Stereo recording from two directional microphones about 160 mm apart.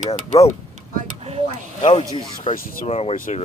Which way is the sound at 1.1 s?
40° right (ahead or behind).